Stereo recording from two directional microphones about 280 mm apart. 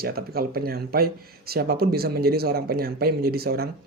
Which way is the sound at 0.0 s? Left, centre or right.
Right.